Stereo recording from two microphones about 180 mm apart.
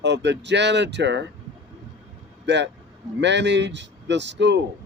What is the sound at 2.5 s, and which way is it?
Speech, 75° right (ahead or behind).